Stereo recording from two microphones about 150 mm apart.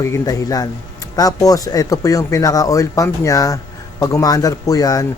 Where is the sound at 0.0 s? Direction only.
20° left (ahead or behind).